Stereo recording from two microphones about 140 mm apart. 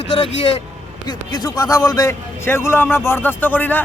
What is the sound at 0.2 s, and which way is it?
Speech, 45° left (ahead or behind).